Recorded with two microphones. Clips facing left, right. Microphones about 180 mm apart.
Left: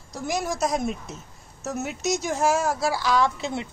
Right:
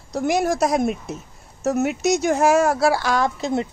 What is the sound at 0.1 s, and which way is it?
Speech, 65° right (ahead or behind).